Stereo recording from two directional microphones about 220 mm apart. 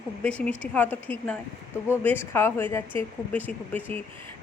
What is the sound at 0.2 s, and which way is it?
A woman's voice, 5° left (ahead or behind).